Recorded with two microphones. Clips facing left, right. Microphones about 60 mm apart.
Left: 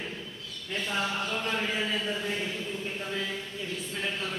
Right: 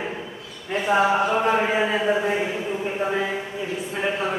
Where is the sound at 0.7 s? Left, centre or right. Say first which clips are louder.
Right 12 dB; right.